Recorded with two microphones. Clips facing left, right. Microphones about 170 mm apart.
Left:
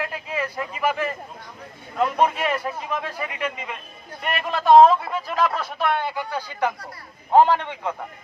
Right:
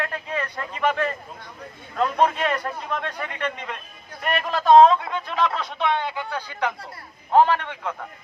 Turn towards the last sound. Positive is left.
turn(degrees=15)  # may be behind; listen again after turning